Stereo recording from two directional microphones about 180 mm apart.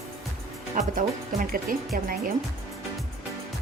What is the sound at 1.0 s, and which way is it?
Speech, 50° right (ahead or behind).